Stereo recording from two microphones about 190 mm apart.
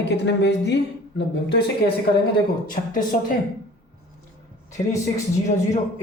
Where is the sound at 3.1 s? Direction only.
35° left (ahead or behind).